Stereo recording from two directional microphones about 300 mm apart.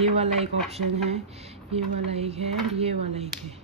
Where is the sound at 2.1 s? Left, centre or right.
Right.